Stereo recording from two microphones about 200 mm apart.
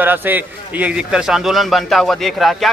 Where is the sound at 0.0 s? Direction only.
10° right (ahead or behind).